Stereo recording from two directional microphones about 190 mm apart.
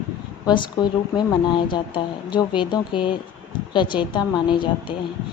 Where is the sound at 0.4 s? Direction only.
25° left (ahead or behind).